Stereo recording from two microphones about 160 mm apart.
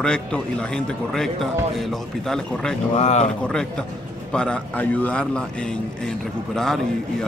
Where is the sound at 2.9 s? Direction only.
40° left (ahead or behind).